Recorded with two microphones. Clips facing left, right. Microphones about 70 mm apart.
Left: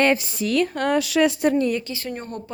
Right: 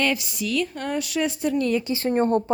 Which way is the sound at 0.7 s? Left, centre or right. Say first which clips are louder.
Left 6 dB; left.